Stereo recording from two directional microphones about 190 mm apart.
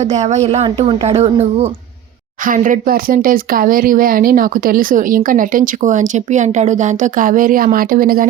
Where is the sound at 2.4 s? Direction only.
45° right (ahead or behind).